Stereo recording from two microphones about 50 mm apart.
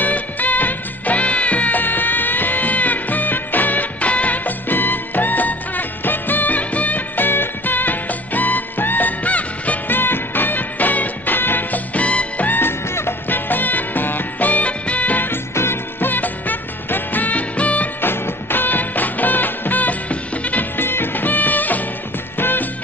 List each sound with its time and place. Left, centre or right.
0.0 s music: left
9.8 s music: left
11.9 s music: left
12.4 s music: left
13.5 s music: left
15.5 s music: left
18.0 s music: left
20.7 s music: left